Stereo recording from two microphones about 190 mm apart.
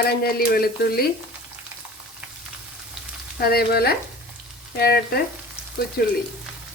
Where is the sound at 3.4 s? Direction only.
55° left (ahead or behind).